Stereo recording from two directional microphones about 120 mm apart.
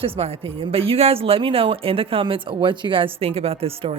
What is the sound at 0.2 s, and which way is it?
Speech, 55° right (ahead or behind).